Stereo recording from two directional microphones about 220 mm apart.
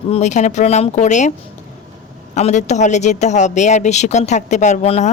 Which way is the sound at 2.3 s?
30° left (ahead or behind).